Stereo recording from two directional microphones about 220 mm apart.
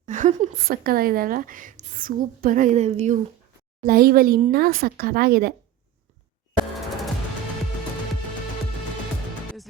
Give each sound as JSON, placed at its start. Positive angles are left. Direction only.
{"t": 0.0, "sound": "a woman's voice", "side_deg": -35}
{"t": 3.8, "sound": "a woman's voice", "side_deg": -40}